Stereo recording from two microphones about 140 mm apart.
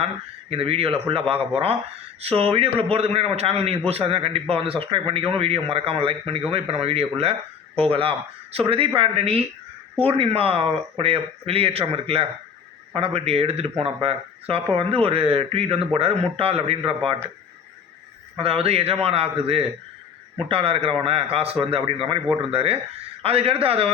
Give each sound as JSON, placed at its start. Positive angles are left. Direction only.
{"t": 0.5, "sound": "a man's voice", "side_deg": -40}
{"t": 18.3, "sound": "a man's voice", "side_deg": -45}